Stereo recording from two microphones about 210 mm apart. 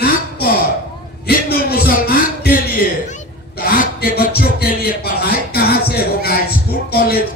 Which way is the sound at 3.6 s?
45° left (ahead or behind).